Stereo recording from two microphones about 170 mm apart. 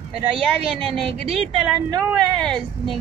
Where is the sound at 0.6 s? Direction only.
35° right (ahead or behind).